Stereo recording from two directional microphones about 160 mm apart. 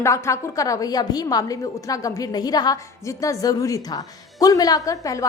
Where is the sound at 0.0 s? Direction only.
20° left (ahead or behind).